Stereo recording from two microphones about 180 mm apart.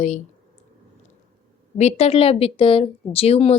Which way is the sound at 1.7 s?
35° left (ahead or behind).